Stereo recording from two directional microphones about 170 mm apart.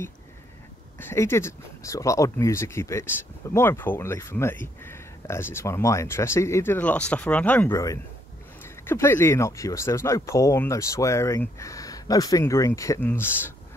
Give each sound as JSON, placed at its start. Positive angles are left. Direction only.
{"t": 0.9, "sound": "speech", "side_deg": 15}